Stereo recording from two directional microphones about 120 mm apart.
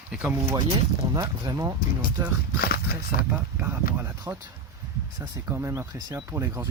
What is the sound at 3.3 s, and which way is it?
Speech, 20° right (ahead or behind).